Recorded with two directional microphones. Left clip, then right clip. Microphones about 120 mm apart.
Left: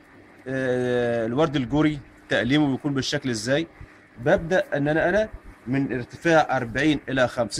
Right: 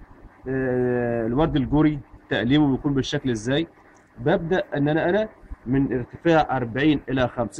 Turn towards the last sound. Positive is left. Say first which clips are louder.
# left 2 dB
turn(degrees=40)  # may be behind; listen again after turning